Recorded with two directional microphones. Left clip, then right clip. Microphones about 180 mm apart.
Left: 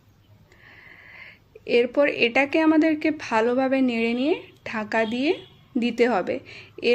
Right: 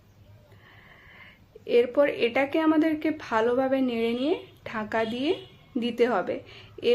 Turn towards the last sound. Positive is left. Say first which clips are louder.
# left 2 dB
turn(degrees=35)  # may be behind; listen again after turning